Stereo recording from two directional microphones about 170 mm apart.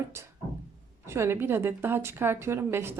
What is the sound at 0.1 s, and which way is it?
A woman's voice, 15° right (ahead or behind).